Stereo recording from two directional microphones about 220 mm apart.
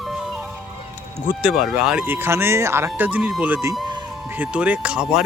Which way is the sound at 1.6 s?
5° right (ahead or behind).